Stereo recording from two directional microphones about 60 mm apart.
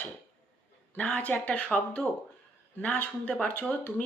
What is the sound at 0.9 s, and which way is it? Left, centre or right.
Speech, left.